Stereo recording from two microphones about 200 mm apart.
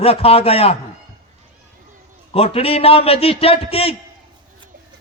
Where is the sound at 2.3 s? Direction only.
30° left (ahead or behind).